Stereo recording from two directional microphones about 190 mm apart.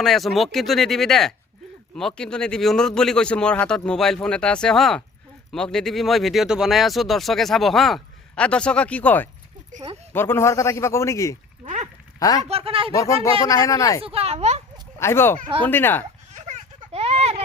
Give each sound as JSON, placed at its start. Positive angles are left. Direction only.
{"t": 0.0, "sound": "a man's voice", "side_deg": 0}
{"t": 11.6, "sound": "clip-clop", "side_deg": -35}
{"t": 12.5, "sound": "speech", "side_deg": -30}
{"t": 12.9, "sound": "a man's voice", "side_deg": 15}
{"t": 14.0, "sound": "speech", "side_deg": -30}
{"t": 14.9, "sound": "a man's voice", "side_deg": 15}
{"t": 16.3, "sound": "a sound", "side_deg": -35}